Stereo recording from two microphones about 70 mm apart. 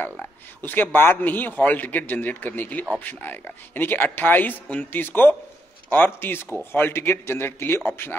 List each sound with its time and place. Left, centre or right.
0.0 s a man's voice: left